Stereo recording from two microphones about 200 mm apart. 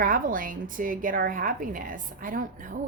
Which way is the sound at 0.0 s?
45° right (ahead or behind).